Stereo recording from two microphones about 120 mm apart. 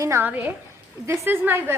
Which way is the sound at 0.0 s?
25° right (ahead or behind).